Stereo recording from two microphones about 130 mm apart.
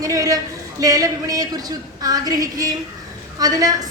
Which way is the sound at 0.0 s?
25° right (ahead or behind).